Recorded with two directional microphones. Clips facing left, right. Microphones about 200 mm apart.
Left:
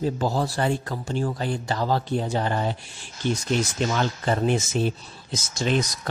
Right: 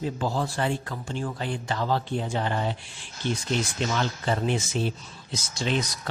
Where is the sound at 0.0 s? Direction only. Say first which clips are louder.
Left 4 dB; 40° left (ahead or behind).